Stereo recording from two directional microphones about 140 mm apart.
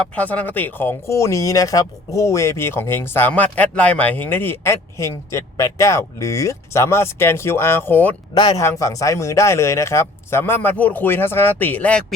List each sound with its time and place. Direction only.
0.2 s speech: 10° left (ahead or behind)
8.4 s speech: 30° left (ahead or behind); by 12.0 s 10° left (ahead or behind)